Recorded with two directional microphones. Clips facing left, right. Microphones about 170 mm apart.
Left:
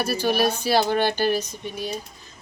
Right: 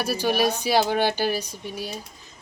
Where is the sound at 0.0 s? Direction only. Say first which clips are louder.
Left 1 dB; 15° right (ahead or behind).